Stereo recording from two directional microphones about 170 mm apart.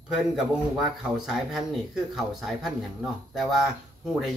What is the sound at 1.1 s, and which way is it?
A man's voice, centre (ahead or behind).